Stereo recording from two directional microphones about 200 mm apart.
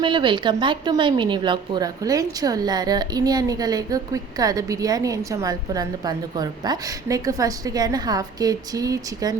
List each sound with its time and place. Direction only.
0.0 s speech: 25° right (ahead or behind)